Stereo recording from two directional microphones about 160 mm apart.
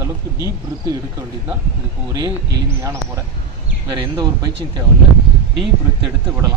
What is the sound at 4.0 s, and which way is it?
Speech, 25° right (ahead or behind).